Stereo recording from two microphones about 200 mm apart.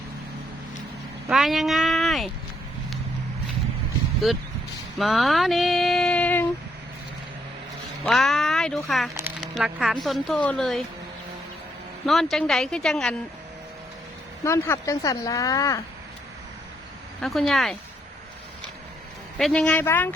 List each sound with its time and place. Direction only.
1.3 s speech: centre (ahead or behind)
4.9 s speech: centre (ahead or behind)
8.0 s speech: centre (ahead or behind)
12.0 s speech: centre (ahead or behind)
14.4 s speech: 15° left (ahead or behind)
17.2 s speech: centre (ahead or behind)
19.4 s speech: 5° left (ahead or behind)